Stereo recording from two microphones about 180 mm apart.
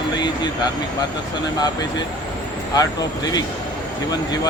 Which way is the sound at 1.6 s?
20° left (ahead or behind).